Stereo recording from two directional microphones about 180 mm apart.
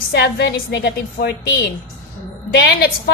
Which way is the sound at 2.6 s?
65° left (ahead or behind).